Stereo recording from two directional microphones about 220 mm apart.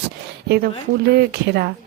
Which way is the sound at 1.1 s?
50° right (ahead or behind).